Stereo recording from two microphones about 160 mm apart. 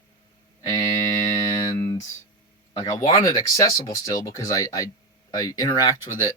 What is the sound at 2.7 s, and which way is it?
A man's voice, 20° left (ahead or behind).